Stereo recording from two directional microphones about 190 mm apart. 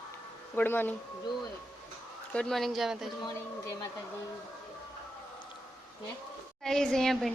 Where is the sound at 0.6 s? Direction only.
10° left (ahead or behind).